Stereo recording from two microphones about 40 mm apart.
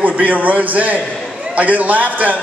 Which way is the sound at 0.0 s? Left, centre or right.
Right.